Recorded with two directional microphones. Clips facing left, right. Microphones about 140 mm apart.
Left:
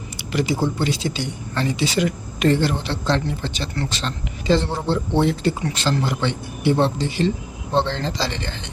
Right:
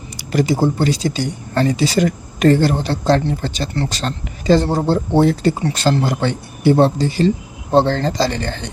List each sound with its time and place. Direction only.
0.2 s speech: 40° right (ahead or behind)